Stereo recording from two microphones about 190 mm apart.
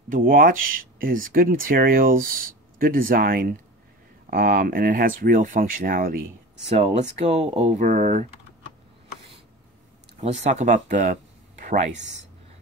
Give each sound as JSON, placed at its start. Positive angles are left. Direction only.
{"t": 0.1, "sound": "speech", "side_deg": -50}
{"t": 10.2, "sound": "speech", "side_deg": -35}